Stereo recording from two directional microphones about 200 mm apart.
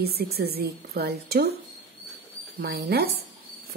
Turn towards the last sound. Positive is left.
turn(degrees=-55)  # may be behind; listen again after turning